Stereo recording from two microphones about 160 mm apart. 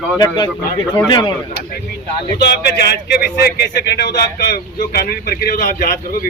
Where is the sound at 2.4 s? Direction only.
90° left.